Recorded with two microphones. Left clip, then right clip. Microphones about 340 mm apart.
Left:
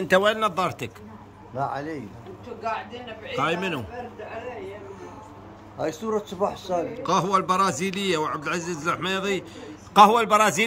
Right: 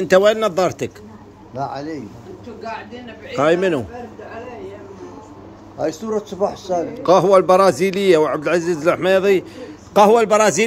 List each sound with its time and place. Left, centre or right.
0.0 s speech: centre
1.5 s speech: left
3.3 s a man's voice: centre
6.1 s speech: centre
7.0 s a man's voice: centre